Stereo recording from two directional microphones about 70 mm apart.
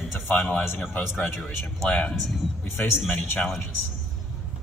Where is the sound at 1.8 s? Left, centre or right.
Centre.